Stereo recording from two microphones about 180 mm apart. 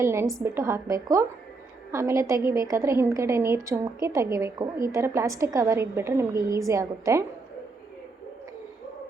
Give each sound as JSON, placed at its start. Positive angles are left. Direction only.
{"t": 0.0, "sound": "a woman's voice", "side_deg": -15}